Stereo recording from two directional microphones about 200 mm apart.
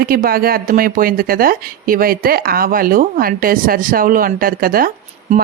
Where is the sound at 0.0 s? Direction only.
50° right (ahead or behind).